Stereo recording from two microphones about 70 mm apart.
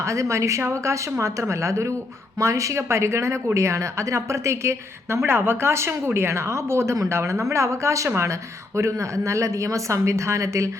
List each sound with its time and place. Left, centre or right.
0.0 s a woman's voice: right